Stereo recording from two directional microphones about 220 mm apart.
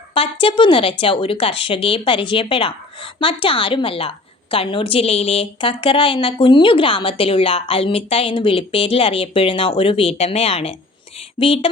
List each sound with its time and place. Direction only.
0.1 s a woman's voice: 25° left (ahead or behind)